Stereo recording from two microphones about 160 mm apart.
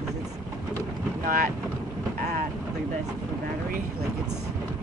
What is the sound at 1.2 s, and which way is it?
Speech, 60° right (ahead or behind).